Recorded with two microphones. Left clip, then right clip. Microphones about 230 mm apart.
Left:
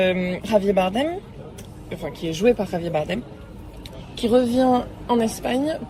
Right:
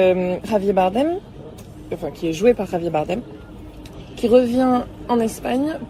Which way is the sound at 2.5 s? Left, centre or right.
Centre.